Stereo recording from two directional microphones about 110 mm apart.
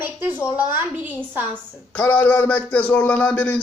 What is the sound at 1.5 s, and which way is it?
Speech, 15° left (ahead or behind).